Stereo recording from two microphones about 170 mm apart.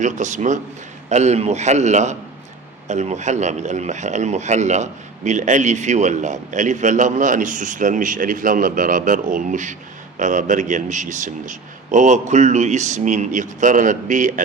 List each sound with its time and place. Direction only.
0.0 s a man's voice: 45° right (ahead or behind)